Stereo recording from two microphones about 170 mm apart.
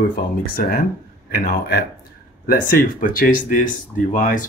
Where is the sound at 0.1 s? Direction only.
60° left (ahead or behind).